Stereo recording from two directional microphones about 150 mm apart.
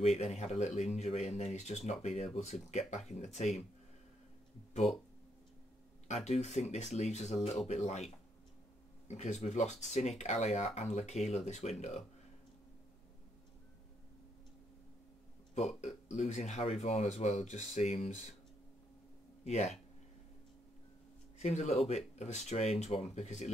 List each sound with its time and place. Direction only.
0.0 s speech: 45° left (ahead or behind)
6.0 s speech: 45° left (ahead or behind)
15.5 s speech: 50° left (ahead or behind)
19.4 s speech: 50° left (ahead or behind)
21.4 s speech: 50° left (ahead or behind)